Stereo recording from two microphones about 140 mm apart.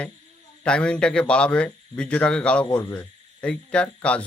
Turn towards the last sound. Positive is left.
turn(degrees=10)  # may be behind; listen again after turning